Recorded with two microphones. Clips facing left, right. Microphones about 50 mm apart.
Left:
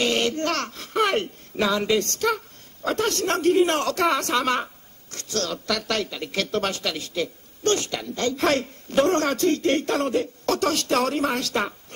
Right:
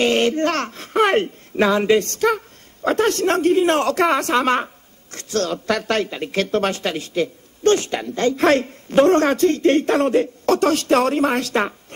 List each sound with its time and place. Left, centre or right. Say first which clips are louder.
0.0 s a woman's voice: right 6 dB; right